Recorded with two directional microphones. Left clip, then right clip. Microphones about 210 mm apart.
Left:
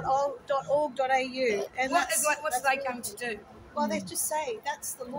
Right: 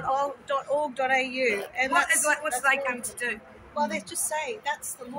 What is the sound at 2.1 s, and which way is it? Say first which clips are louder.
A man's voice: right 3 dB; 25° left (ahead or behind).